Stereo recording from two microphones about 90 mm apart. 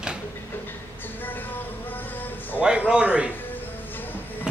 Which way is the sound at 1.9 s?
20° left (ahead or behind).